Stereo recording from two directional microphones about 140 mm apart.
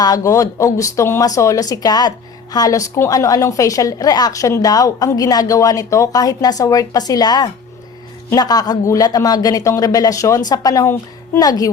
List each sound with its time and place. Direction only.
0.0 s speech: 25° left (ahead or behind)